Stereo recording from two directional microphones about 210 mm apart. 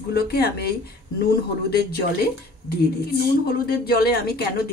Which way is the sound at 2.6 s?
50° left (ahead or behind).